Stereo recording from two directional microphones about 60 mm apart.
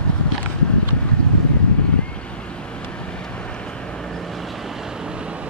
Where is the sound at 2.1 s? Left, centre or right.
Centre.